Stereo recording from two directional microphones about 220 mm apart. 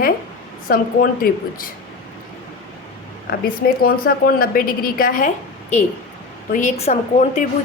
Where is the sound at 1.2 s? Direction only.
40° left (ahead or behind).